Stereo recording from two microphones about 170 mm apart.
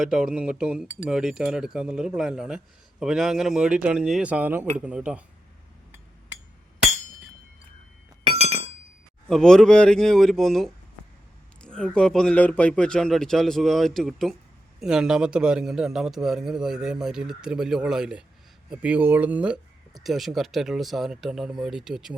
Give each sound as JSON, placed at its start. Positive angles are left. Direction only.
{"t": 0.0, "sound": "a man's voice", "side_deg": -5}
{"t": 8.2, "sound": "chink", "side_deg": -35}
{"t": 9.3, "sound": "a man's voice", "side_deg": 5}